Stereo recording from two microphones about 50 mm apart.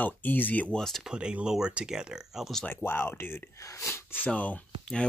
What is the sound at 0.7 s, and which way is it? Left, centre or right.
Speech, centre.